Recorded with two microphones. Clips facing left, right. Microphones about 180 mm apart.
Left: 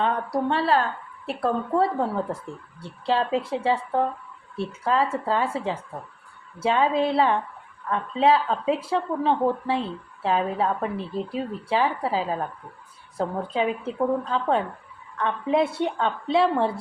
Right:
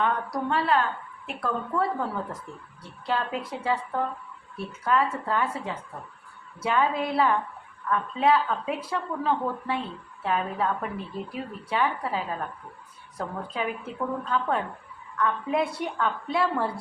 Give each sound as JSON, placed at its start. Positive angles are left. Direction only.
{"t": 0.0, "sound": "a woman's voice", "side_deg": 30}